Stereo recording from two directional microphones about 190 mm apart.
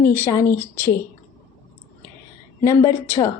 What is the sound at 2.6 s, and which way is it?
Speech, 15° left (ahead or behind).